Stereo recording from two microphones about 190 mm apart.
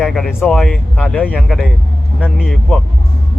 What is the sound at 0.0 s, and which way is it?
Speech, centre (ahead or behind).